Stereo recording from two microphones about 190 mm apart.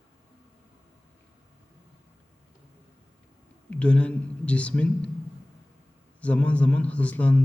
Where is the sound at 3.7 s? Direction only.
5° left (ahead or behind).